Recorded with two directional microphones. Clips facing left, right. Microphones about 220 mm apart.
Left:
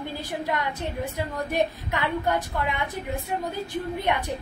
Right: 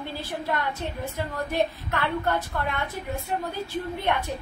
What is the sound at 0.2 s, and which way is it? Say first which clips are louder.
A woman's voice: even; 15° left (ahead or behind).